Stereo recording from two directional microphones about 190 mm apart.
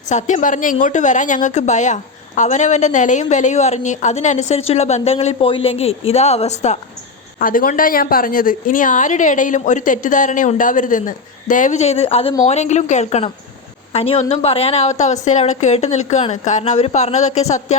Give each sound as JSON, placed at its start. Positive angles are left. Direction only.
{"t": 0.1, "sound": "a woman's voice", "side_deg": 40}
{"t": 7.3, "sound": "a woman's voice", "side_deg": 45}